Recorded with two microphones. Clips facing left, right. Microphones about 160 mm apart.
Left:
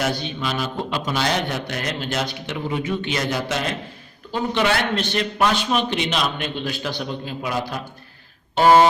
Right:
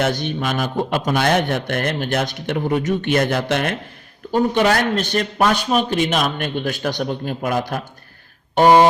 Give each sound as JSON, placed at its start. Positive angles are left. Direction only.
{"t": 0.0, "sound": "a man's voice", "side_deg": -50}
{"t": 4.3, "sound": "a man's voice", "side_deg": -45}
{"t": 8.6, "sound": "speech", "side_deg": -15}